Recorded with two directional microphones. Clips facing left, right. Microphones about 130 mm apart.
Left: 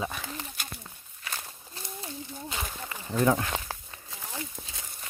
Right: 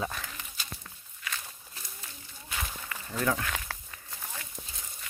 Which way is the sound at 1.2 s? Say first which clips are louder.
Left 1 dB; 30° left (ahead or behind).